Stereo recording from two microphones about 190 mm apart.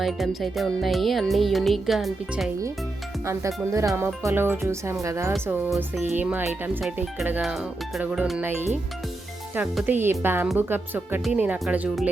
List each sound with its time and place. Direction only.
0.0 s music: centre (ahead or behind)
3.2 s speech: 15° right (ahead or behind)
5.3 s music: 5° right (ahead or behind)
9.6 s speech: 10° right (ahead or behind)